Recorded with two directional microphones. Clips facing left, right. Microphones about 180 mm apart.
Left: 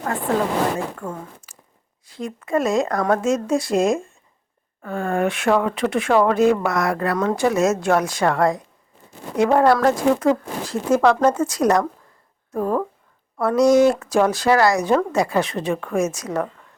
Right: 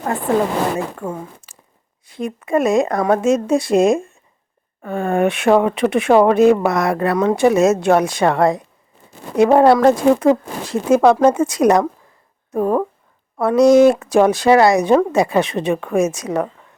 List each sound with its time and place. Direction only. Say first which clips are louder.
0.0 s speech: right 4 dB; 20° right (ahead or behind)